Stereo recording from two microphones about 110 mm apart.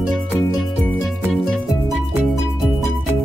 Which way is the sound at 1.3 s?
Centre (ahead or behind).